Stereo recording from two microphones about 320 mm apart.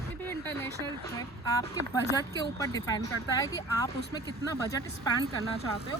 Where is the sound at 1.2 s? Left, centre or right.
Centre.